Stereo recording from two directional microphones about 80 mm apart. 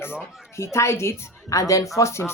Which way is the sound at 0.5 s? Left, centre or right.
Left.